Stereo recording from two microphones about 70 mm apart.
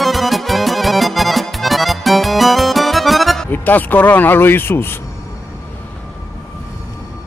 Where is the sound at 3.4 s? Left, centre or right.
Left.